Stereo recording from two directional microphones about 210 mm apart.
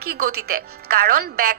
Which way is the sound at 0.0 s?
45° right (ahead or behind).